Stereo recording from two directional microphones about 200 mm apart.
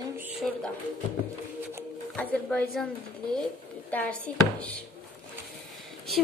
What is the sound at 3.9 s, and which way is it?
Speech, 10° left (ahead or behind).